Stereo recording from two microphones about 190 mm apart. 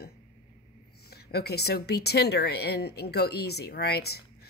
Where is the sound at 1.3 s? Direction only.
60° left (ahead or behind).